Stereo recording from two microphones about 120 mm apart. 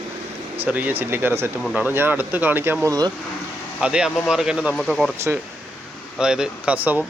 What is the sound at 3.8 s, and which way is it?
Speech, 5° right (ahead or behind).